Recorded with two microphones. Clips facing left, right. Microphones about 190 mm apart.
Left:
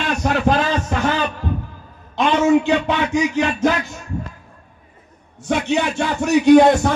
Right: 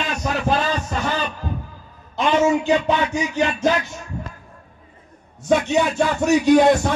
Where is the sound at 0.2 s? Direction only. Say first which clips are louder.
Left 4 dB; 90° left.